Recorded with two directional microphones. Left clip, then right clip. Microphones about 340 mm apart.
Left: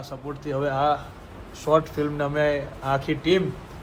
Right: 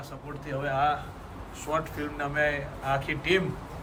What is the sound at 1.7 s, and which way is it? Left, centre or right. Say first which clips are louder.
A man's voice: left 9 dB; centre.